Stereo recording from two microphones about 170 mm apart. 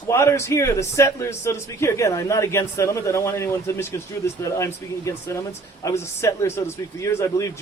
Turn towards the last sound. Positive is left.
turn(degrees=15)  # may be behind; listen again after turning